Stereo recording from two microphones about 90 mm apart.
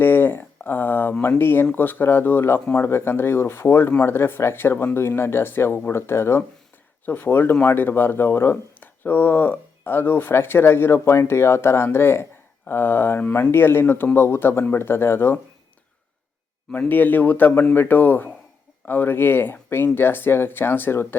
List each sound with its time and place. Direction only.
0.0 s a sound: 25° left (ahead or behind)
1.4 s speech: 25° left (ahead or behind)
16.7 s speech: 20° left (ahead or behind)